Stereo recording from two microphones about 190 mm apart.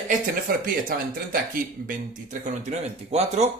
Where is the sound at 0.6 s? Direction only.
50° right (ahead or behind).